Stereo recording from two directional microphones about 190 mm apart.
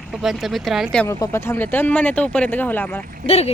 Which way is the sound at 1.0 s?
15° left (ahead or behind).